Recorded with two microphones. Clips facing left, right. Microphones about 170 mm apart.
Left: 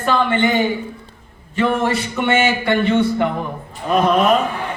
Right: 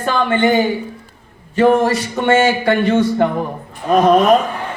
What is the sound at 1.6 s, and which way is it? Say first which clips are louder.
A man's voice: right 5 dB; 35° right (ahead or behind).